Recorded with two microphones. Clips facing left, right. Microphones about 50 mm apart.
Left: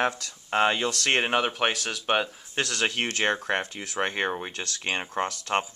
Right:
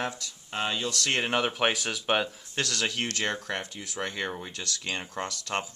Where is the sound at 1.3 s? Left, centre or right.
Centre.